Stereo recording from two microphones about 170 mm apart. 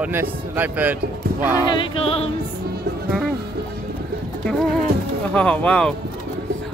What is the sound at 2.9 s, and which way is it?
Music, 70° right (ahead or behind).